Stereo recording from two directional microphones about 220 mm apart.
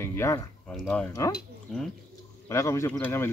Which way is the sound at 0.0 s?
10° left (ahead or behind).